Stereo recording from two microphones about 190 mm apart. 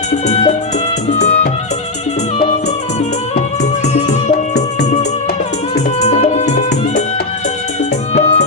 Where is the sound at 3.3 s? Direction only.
40° left (ahead or behind).